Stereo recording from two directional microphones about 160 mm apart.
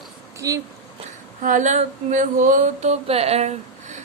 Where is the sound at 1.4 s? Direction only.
50° right (ahead or behind).